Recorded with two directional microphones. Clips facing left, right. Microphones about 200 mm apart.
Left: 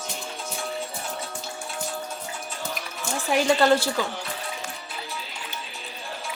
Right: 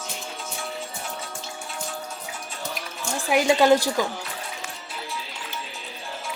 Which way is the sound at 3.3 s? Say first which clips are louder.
Right 2 dB; 15° right (ahead or behind).